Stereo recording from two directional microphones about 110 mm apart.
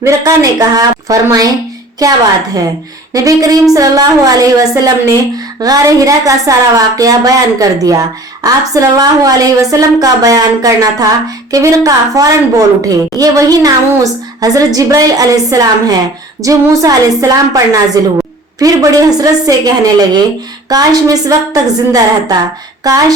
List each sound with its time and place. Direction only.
0.2 s a woman's voice: 35° right (ahead or behind)
3.1 s a woman's voice: 30° right (ahead or behind)